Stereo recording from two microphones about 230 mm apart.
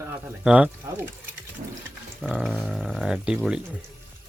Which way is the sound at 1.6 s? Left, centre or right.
Right.